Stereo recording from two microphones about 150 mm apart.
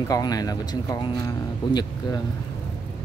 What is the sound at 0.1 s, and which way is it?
Speech, 25° left (ahead or behind).